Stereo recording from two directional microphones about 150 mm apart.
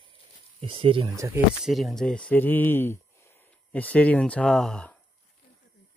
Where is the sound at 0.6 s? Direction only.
40° right (ahead or behind).